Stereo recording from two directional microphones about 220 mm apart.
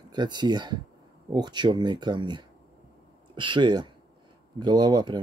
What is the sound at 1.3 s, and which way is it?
Speech, 20° right (ahead or behind).